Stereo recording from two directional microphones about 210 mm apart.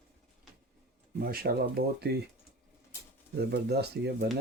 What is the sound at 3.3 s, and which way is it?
Speech, 50° right (ahead or behind).